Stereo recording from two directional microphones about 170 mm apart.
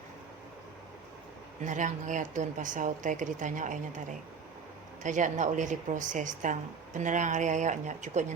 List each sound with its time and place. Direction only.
1.6 s speech: 45° right (ahead or behind)
5.0 s speech: 45° right (ahead or behind)